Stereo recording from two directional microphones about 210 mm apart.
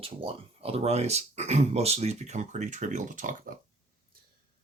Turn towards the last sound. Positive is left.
turn(degrees=-40)  # may be behind; listen again after turning